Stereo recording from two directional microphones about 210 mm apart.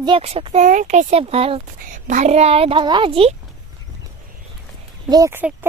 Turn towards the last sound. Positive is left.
turn(degrees=-10)  # may be behind; listen again after turning